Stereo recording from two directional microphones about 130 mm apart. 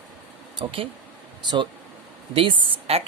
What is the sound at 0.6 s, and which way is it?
Speech, 45° right (ahead or behind).